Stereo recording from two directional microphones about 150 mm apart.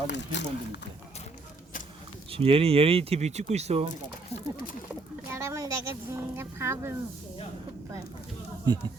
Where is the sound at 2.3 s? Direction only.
40° right (ahead or behind).